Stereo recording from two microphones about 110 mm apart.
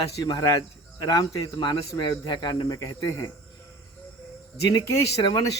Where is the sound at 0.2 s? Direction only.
35° left (ahead or behind).